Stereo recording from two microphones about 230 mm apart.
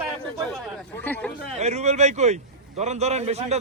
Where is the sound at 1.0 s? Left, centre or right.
Centre.